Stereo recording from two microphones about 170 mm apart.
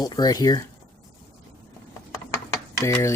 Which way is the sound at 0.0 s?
25° left (ahead or behind).